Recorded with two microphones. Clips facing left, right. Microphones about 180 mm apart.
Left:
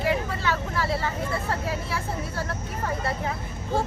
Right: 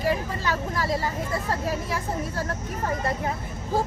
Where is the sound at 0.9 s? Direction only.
15° right (ahead or behind).